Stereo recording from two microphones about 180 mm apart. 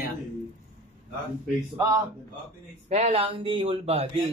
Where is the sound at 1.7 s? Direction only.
20° right (ahead or behind).